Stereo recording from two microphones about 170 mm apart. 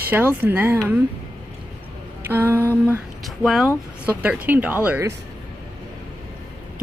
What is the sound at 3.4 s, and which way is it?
Speech, centre (ahead or behind).